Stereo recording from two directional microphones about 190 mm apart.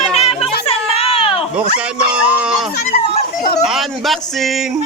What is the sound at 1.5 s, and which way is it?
Speech, 5° right (ahead or behind).